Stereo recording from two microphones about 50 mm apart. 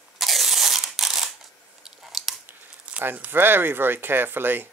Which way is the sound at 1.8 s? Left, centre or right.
Centre.